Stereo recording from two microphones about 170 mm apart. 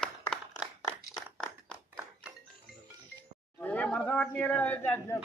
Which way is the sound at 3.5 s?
10° left (ahead or behind).